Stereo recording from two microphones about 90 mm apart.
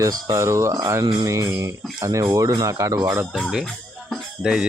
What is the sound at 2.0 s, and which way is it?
Speech, 45° right (ahead or behind).